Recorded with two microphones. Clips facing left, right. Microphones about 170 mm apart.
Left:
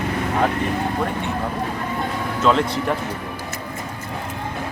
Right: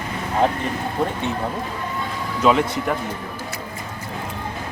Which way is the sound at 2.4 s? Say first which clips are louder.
Right 1 dB; 10° right (ahead or behind).